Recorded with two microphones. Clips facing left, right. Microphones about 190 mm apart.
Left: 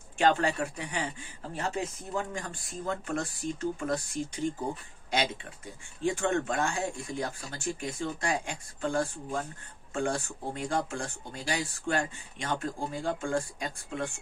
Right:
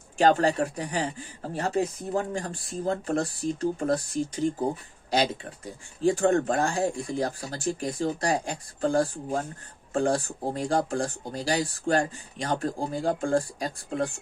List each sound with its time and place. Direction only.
0.2 s speech: 40° right (ahead or behind)